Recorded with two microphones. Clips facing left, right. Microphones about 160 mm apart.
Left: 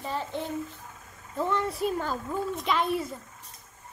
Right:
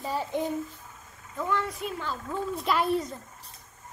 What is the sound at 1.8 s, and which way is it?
Speech, 45° left (ahead or behind).